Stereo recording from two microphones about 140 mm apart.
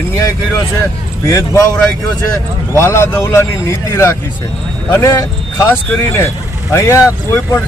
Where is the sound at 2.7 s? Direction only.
20° left (ahead or behind).